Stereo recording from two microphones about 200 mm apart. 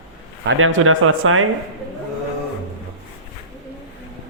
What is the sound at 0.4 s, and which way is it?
Speech, 85° right.